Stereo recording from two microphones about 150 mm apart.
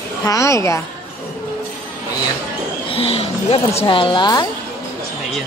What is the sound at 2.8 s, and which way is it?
Speech, 40° left (ahead or behind).